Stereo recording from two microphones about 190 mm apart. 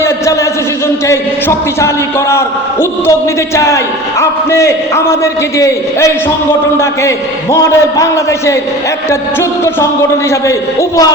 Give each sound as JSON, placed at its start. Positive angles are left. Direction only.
{"t": 1.0, "sound": "a man's voice", "side_deg": 15}
{"t": 7.5, "sound": "a man's voice", "side_deg": 15}